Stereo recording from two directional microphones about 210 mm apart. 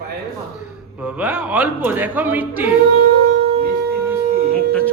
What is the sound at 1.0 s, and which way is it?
Speech, 5° right (ahead or behind).